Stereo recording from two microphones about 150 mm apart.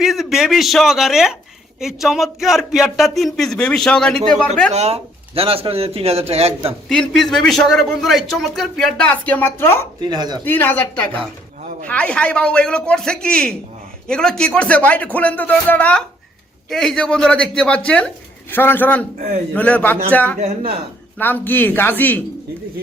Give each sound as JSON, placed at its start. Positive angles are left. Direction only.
{"t": 0.0, "sound": "a man's voice", "side_deg": 0}
{"t": 4.7, "sound": "speech", "side_deg": -45}
{"t": 6.8, "sound": "a man's voice", "side_deg": 5}
{"t": 10.0, "sound": "speech", "side_deg": -30}
{"t": 10.4, "sound": "a man's voice", "side_deg": 15}
{"t": 20.4, "sound": "a man's voice", "side_deg": -45}
{"t": 21.2, "sound": "speech", "side_deg": 10}